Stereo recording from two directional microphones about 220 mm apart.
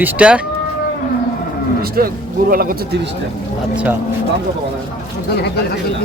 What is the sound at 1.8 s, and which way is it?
Speech, 40° right (ahead or behind).